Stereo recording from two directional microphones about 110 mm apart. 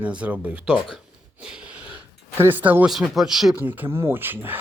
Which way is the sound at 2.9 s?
Centre (ahead or behind).